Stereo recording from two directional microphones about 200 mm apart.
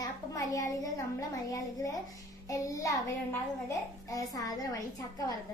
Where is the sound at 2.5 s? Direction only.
15° left (ahead or behind).